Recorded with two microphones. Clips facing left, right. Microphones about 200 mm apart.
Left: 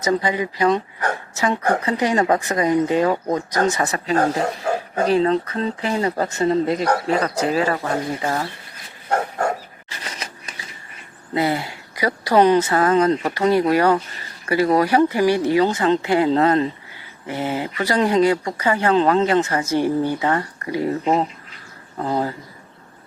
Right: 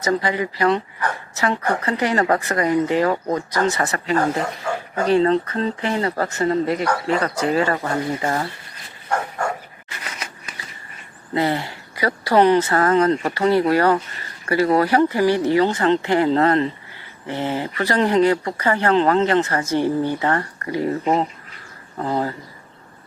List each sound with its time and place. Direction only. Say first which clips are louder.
0.0 s speech: left 1 dB; 15° left (ahead or behind)
1.8 s speech: left 1 dB; 15° left (ahead or behind)
4.1 s speech: left 1 dB; 40° left (ahead or behind)
5.2 s speech: right 1 dB; 5° left (ahead or behind); by 6.8 s 20° left (ahead or behind)
6.8 s speech: left 1 dB; 35° left (ahead or behind)
7.9 s speech: even; 5° left (ahead or behind)
9.0 s dog: left 2 dB; 40° left (ahead or behind)
11.3 s speech: even; 10° left (ahead or behind)
21.0 s speech: even; centre (ahead or behind)